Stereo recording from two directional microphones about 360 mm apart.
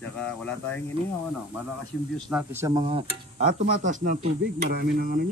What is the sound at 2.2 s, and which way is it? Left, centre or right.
Speech, centre.